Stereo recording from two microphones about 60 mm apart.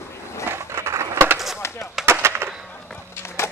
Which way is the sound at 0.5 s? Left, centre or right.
Right.